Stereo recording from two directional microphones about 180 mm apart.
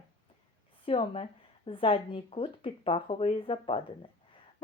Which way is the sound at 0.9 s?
30° left (ahead or behind).